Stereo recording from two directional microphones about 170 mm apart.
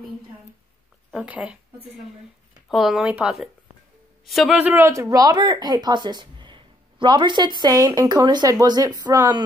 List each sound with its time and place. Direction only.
1.1 s speech: 5° right (ahead or behind)